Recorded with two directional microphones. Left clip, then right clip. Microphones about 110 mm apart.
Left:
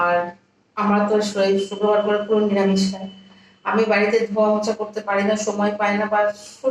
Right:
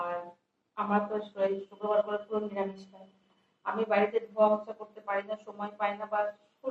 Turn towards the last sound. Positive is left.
turn(degrees=30)  # may be behind; listen again after turning